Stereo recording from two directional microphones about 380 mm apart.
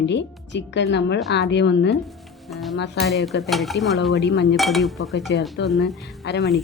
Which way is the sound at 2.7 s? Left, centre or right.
Left.